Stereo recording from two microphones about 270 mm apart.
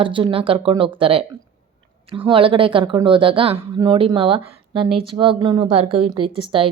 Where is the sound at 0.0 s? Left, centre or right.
Centre.